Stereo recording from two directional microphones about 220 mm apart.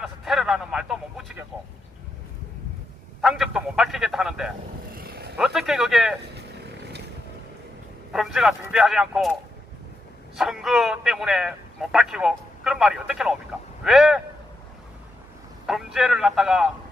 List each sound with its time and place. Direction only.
0.0 s a man's voice: centre (ahead or behind)
3.2 s a man's voice: centre (ahead or behind)
4.9 s vehicle: 45° right (ahead or behind)
5.4 s a man's voice: centre (ahead or behind)
8.1 s a man's voice: centre (ahead or behind)
15.6 s a man's voice: centre (ahead or behind)